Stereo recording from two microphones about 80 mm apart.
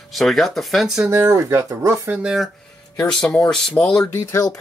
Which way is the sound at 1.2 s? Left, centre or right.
Right.